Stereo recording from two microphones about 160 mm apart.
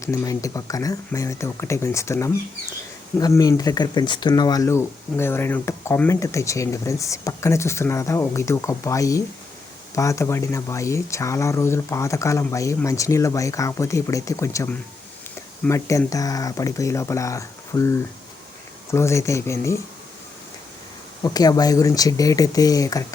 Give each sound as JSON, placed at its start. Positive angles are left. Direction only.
{"t": 0.0, "sound": "speech", "side_deg": 20}
{"t": 21.2, "sound": "speech", "side_deg": 25}